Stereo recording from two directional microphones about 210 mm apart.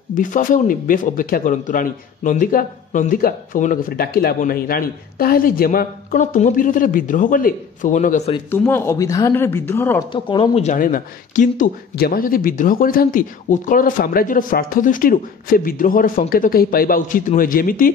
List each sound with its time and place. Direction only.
0.1 s speech: 40° left (ahead or behind)
8.5 s speech: 10° left (ahead or behind)
10.1 s speech: 25° left (ahead or behind); by 17.9 s 40° left (ahead or behind)